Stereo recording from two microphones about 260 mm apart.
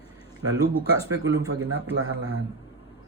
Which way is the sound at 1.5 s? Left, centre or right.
Right.